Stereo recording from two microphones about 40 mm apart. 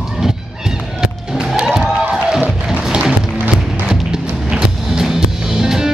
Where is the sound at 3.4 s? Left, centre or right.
Right.